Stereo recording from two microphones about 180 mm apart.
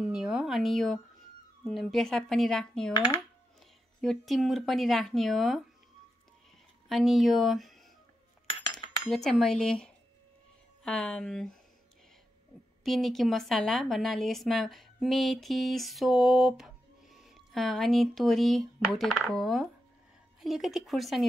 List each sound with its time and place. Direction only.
0.0 s a sound: 5° right (ahead or behind)
1.6 s a woman's voice: centre (ahead or behind)
2.9 s speech: 25° left (ahead or behind)
4.0 s a woman's voice: centre (ahead or behind)
6.9 s a woman's voice: centre (ahead or behind)
8.8 s cutlery: 30° left (ahead or behind)
9.1 s a woman's voice: centre (ahead or behind)
12.8 s a woman's voice: centre (ahead or behind)